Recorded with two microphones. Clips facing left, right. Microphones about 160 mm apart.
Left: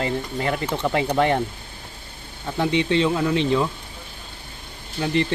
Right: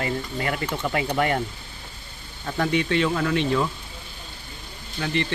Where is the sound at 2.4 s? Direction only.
20° left (ahead or behind).